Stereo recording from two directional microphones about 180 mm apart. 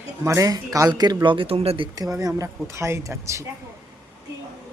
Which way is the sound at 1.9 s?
20° right (ahead or behind).